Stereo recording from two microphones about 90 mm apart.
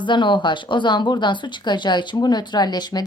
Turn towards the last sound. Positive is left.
turn(degrees=50)  # may be behind; listen again after turning